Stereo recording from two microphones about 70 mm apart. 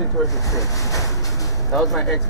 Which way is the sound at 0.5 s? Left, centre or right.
Left.